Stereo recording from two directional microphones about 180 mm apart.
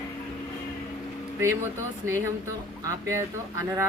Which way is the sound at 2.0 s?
15° right (ahead or behind).